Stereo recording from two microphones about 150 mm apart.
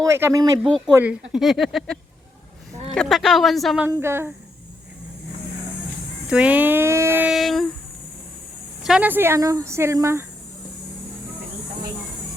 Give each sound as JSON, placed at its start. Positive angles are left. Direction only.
{"t": 0.0, "sound": "speech", "side_deg": -20}
{"t": 0.9, "sound": "speech", "side_deg": -5}
{"t": 4.0, "sound": "speech", "side_deg": -15}
{"t": 6.2, "sound": "speech", "side_deg": -5}
{"t": 7.3, "sound": "speech", "side_deg": 0}
{"t": 8.8, "sound": "speech", "side_deg": -5}